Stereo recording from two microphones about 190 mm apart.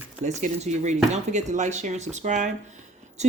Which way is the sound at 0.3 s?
40° right (ahead or behind).